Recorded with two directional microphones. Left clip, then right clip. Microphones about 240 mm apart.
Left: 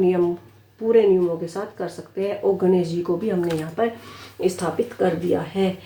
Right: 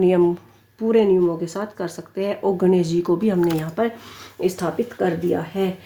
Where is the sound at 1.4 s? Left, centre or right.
Right.